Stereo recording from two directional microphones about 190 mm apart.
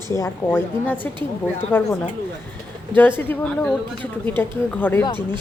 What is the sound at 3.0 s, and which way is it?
Speech, 10° left (ahead or behind).